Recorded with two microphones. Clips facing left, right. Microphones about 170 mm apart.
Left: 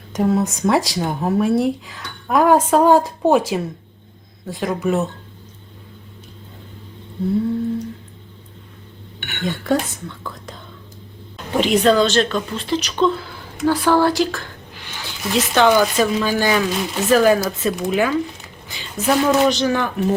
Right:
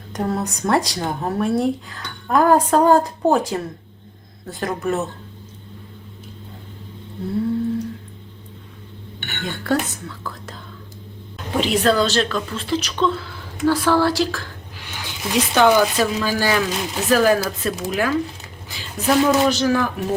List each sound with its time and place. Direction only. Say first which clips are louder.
0.1 s speech: left 5 dB; centre (ahead or behind)
7.3 s speech: left 1 dB; centre (ahead or behind)
9.4 s speech: left 2 dB; centre (ahead or behind)
15.0 s speech: left 1 dB; 10° right (ahead or behind)
15.7 s a woman's voice: left 1 dB; centre (ahead or behind)